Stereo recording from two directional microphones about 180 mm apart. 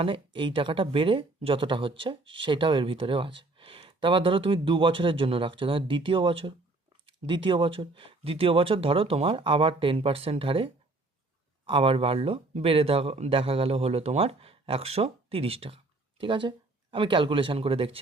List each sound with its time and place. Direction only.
0.0 s speech: 30° right (ahead or behind)
11.7 s speech: 30° right (ahead or behind)